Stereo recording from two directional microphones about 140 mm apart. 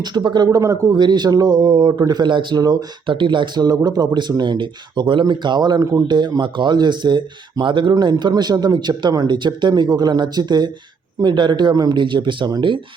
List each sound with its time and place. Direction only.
0.0 s speech: 30° right (ahead or behind)